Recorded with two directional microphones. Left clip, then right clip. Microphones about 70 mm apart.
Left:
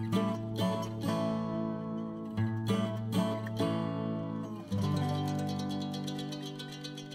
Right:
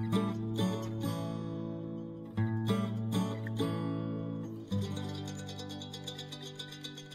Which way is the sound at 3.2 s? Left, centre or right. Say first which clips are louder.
Left 3 dB; left.